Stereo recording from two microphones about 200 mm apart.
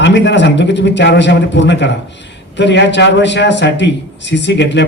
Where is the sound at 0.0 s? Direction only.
60° left (ahead or behind).